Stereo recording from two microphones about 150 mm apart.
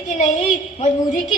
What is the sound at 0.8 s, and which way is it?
Speech, 55° left (ahead or behind).